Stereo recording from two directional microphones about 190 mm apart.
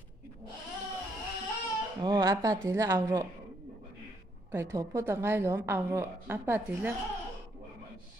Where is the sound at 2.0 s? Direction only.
20° right (ahead or behind).